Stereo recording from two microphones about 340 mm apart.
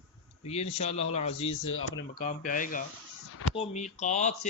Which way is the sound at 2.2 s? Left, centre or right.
Left.